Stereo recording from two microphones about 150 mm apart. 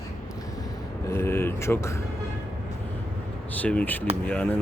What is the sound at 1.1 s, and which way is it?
Speech, 15° left (ahead or behind).